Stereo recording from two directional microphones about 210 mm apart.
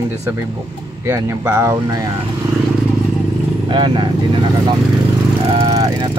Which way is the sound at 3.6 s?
20° right (ahead or behind).